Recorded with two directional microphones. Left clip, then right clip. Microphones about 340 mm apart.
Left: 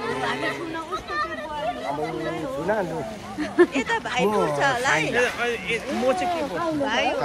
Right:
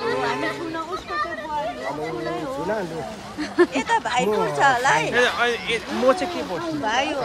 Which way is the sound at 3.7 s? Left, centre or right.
Right.